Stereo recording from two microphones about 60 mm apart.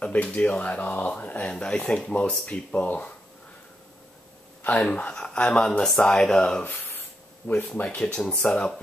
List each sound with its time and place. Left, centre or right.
0.0 s speech: left
4.9 s speech: centre
6.6 s a sound: left
8.2 s speech: centre